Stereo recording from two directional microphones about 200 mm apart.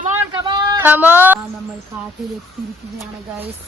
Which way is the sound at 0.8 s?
10° right (ahead or behind).